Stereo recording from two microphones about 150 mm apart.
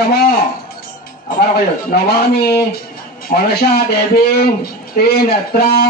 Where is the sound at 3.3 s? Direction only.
65° left (ahead or behind).